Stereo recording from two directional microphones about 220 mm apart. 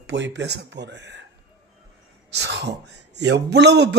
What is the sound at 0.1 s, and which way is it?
Speech, 55° right (ahead or behind).